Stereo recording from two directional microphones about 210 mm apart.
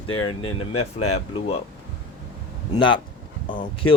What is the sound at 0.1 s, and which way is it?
Speech, 80° left.